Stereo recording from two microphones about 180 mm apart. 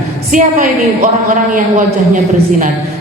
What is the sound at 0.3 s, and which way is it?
Speech, 50° right (ahead or behind).